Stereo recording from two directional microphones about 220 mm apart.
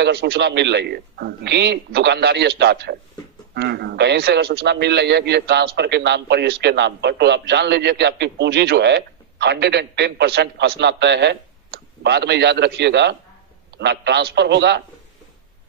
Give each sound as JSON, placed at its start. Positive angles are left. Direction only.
{"t": 0.0, "sound": "a man's voice", "side_deg": -50}